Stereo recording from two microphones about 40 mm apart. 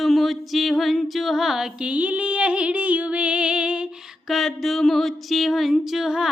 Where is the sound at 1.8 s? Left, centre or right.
Right.